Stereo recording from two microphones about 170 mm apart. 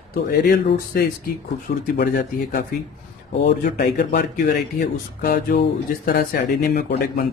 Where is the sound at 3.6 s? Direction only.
55° left (ahead or behind).